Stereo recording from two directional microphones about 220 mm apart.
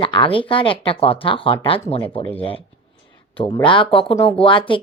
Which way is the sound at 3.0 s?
25° left (ahead or behind).